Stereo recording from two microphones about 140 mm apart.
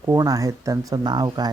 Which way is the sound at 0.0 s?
25° right (ahead or behind).